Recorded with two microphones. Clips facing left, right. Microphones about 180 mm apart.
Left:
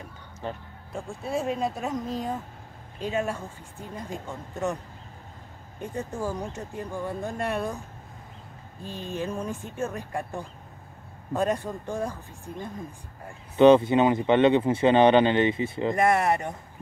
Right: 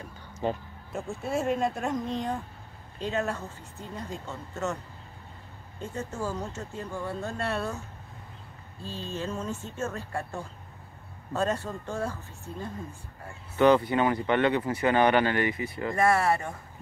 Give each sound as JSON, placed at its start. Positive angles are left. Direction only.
{"t": 0.9, "sound": "speech", "side_deg": 0}
{"t": 5.8, "sound": "speech", "side_deg": 15}
{"t": 8.8, "sound": "speech", "side_deg": 15}
{"t": 13.6, "sound": "speech", "side_deg": 20}